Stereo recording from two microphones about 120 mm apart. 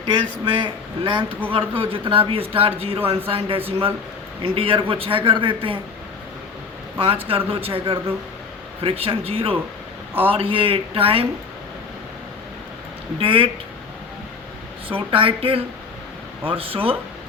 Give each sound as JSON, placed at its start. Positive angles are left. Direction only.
{"t": 0.0, "sound": "speech", "side_deg": -45}
{"t": 7.0, "sound": "speech", "side_deg": -50}
{"t": 13.1, "sound": "speech", "side_deg": -45}
{"t": 14.8, "sound": "speech", "side_deg": -50}